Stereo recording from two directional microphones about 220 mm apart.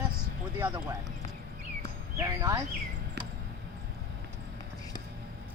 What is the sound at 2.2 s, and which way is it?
Speech, 15° right (ahead or behind).